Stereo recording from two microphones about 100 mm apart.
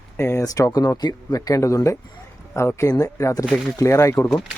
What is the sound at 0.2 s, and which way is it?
Speech, 25° left (ahead or behind).